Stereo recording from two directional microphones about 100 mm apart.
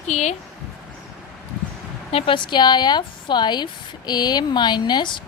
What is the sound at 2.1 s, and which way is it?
Speech, 55° left (ahead or behind).